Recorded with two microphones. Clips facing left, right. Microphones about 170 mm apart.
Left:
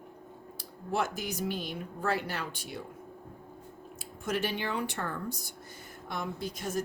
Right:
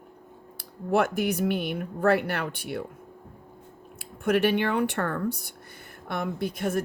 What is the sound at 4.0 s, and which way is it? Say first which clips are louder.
Speech: right 9 dB; 60° right (ahead or behind).